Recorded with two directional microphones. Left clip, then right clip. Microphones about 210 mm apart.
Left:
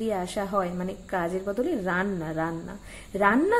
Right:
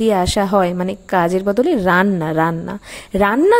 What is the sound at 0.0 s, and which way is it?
A woman's voice, 50° right (ahead or behind).